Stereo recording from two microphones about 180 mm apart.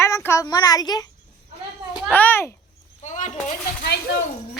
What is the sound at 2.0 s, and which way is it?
Speech, 10° left (ahead or behind).